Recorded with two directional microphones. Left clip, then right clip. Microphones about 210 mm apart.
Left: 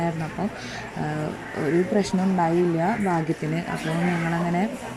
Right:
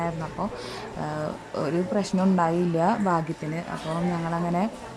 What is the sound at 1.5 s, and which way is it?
A child's voice, centre (ahead or behind).